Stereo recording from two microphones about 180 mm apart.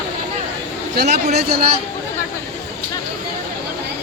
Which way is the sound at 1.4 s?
60° right (ahead or behind).